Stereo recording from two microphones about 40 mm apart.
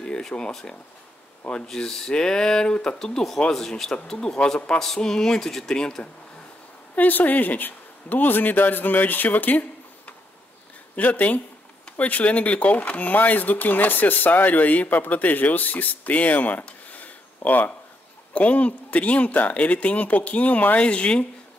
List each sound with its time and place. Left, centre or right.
0.0 s speech: centre
1.7 s speech: centre
3.6 s speech: centre
7.0 s speech: left
16.6 s a sound: left
18.3 s speech: left